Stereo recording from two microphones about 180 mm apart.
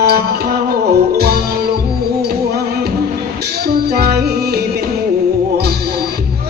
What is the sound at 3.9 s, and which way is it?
Music, 60° right (ahead or behind).